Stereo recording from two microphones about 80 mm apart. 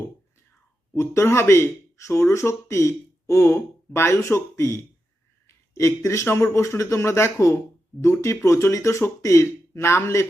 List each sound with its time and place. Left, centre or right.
0.9 s speech: left